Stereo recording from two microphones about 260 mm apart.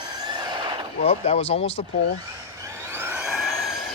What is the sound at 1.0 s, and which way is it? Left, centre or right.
Speech, left.